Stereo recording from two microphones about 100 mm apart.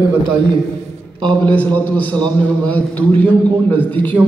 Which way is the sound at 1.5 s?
15° left (ahead or behind).